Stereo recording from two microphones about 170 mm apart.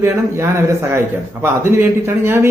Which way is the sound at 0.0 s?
15° right (ahead or behind).